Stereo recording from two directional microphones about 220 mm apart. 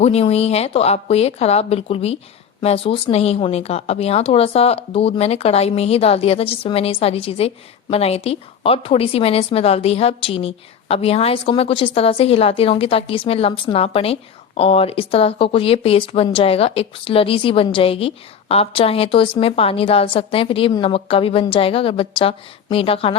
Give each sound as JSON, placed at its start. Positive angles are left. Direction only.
{"t": 0.0, "sound": "speech", "side_deg": 25}